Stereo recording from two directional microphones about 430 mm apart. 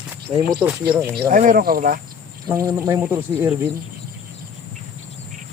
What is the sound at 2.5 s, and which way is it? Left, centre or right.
Speech, centre.